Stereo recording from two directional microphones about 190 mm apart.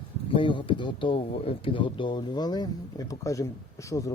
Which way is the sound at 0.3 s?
25° left (ahead or behind).